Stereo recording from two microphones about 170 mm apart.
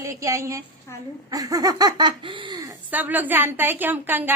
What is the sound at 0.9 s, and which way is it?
Speech, 15° left (ahead or behind).